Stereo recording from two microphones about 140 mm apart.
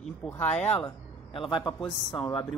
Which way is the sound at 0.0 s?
10° left (ahead or behind).